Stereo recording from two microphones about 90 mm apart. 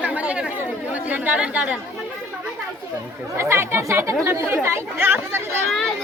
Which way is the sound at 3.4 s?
30° right (ahead or behind).